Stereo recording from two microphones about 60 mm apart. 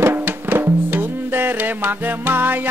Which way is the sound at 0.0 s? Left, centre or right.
Right.